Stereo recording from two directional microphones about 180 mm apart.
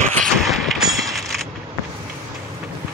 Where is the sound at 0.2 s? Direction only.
Centre (ahead or behind).